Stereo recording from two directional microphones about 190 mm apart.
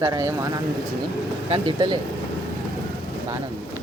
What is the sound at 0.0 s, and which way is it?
Speech, 15° right (ahead or behind).